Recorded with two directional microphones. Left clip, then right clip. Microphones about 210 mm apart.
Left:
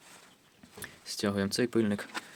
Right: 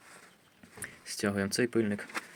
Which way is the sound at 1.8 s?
20° left (ahead or behind).